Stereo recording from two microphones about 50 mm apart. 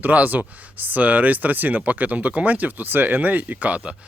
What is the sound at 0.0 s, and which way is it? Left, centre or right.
Speech, right.